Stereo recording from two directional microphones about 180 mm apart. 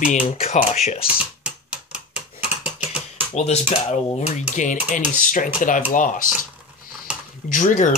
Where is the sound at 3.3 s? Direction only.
35° left (ahead or behind).